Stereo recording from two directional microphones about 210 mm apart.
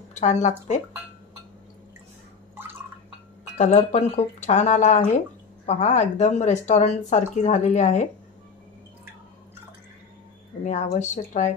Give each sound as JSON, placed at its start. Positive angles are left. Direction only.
{"t": 0.1, "sound": "speech", "side_deg": 35}
{"t": 3.5, "sound": "speech", "side_deg": 30}
{"t": 10.6, "sound": "speech", "side_deg": 35}